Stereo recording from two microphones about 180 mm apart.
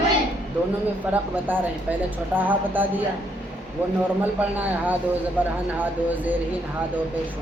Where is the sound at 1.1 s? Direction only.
10° right (ahead or behind).